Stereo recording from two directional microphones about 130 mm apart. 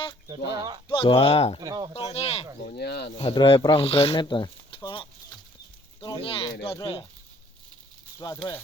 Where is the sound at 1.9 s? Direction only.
50° left (ahead or behind).